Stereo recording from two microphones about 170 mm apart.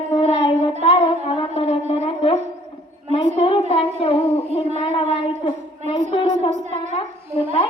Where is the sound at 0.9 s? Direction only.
30° left (ahead or behind).